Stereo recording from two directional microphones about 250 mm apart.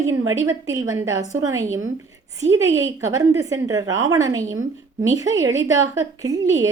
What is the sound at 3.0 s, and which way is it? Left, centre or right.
A woman's voice, centre.